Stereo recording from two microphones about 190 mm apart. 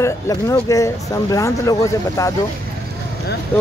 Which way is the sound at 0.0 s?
15° left (ahead or behind).